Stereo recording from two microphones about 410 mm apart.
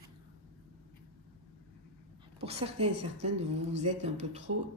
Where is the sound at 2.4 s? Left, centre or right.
Centre.